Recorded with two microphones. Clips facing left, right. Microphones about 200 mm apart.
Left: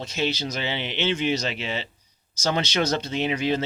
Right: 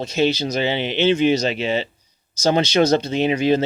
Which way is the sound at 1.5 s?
20° right (ahead or behind).